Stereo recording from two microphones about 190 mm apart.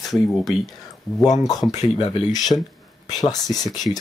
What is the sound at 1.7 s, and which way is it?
Speech, 20° left (ahead or behind).